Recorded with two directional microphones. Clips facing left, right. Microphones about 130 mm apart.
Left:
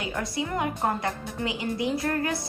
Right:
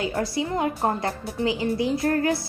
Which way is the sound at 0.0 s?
30° right (ahead or behind).